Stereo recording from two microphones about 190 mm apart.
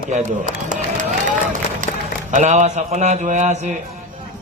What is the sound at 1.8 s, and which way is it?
A man's voice, 40° right (ahead or behind).